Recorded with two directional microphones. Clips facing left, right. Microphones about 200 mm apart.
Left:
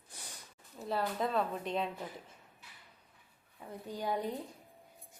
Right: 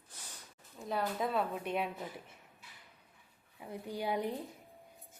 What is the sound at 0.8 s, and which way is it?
Speech, centre (ahead or behind).